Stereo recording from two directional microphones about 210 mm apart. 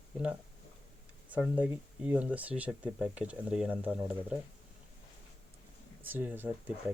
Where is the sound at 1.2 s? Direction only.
5° right (ahead or behind).